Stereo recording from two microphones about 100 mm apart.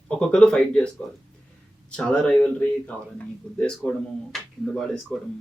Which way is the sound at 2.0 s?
10° left (ahead or behind).